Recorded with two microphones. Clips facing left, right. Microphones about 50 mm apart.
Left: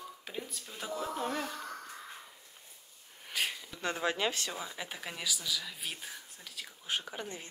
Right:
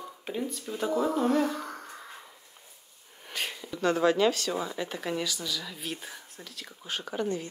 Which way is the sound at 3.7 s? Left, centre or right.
Centre.